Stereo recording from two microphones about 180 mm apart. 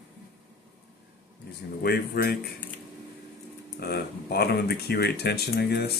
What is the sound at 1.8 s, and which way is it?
Speech, 60° left (ahead or behind).